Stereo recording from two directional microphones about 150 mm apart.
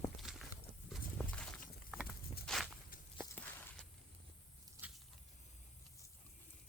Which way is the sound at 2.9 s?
70° left (ahead or behind).